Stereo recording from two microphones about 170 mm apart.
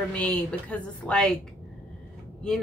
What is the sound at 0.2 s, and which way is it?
A woman's voice, 5° left (ahead or behind).